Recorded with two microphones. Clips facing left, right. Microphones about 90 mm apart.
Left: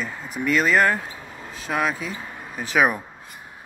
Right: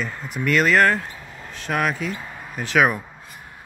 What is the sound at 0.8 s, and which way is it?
Speech, 20° left (ahead or behind).